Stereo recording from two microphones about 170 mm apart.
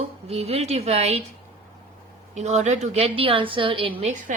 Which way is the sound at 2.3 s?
40° right (ahead or behind).